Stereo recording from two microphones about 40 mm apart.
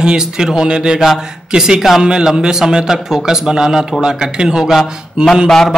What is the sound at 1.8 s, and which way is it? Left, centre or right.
A man's voice, centre.